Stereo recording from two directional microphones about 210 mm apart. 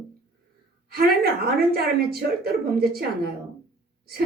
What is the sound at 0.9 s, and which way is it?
Speech, 45° right (ahead or behind).